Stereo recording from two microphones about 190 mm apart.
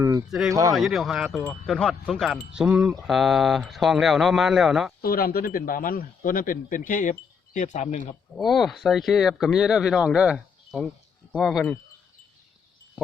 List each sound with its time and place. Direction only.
0.3 s speech: centre (ahead or behind)
5.0 s a man's voice: 50° left (ahead or behind)
8.4 s speech: centre (ahead or behind)